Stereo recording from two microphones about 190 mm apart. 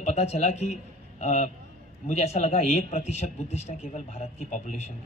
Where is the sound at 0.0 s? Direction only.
35° left (ahead or behind).